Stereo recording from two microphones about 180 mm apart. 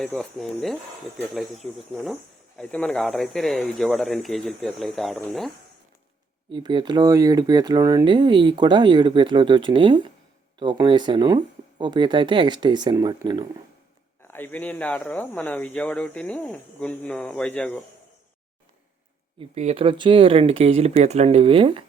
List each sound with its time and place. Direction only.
0.0 s speech: 5° left (ahead or behind)
6.5 s speech: 25° right (ahead or behind)
14.2 s speech: 10° left (ahead or behind)
19.4 s speech: 35° right (ahead or behind)